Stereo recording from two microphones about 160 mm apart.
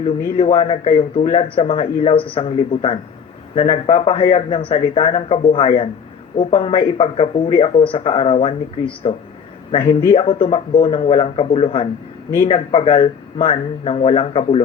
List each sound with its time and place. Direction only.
0.3 s speech: 40° left (ahead or behind)